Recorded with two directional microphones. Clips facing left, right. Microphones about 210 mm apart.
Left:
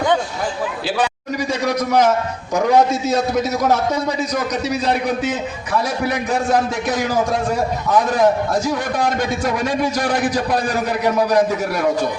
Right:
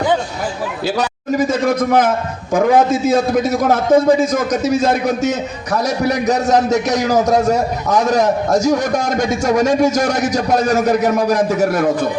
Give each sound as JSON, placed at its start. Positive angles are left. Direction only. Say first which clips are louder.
{"t": 0.9, "sound": "a man's voice", "louder": "right 6 dB", "side_deg": -50}